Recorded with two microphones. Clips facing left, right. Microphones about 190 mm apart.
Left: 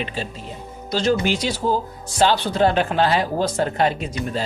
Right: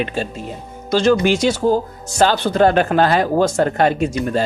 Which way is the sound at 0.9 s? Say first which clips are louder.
Right 5 dB; 80° right.